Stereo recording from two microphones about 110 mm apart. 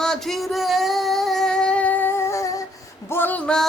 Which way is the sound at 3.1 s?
15° left (ahead or behind).